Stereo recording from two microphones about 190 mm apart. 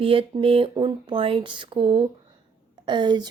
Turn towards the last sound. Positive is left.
turn(degrees=-25)  # may be behind; listen again after turning